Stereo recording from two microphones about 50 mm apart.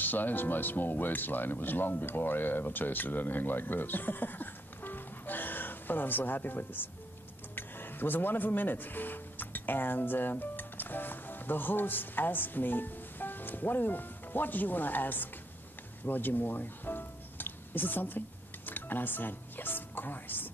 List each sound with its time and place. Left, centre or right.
0.0 s speech: left
16.1 s music: left
18.7 s speech: left